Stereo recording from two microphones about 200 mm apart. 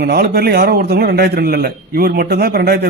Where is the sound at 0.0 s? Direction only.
50° right (ahead or behind).